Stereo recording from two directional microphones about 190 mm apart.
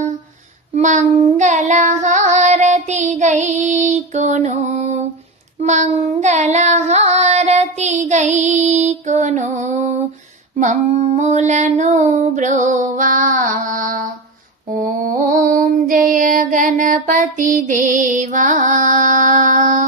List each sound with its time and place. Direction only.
0.7 s child singing: 40° right (ahead or behind)
10.6 s female singing: 40° right (ahead or behind)
14.7 s mantra: 45° right (ahead or behind)